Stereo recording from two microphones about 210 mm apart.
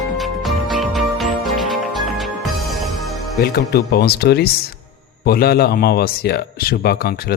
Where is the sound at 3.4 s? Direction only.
50° left (ahead or behind).